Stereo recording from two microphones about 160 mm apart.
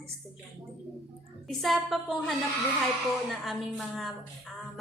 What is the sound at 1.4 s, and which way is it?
A woman's voice, centre (ahead or behind).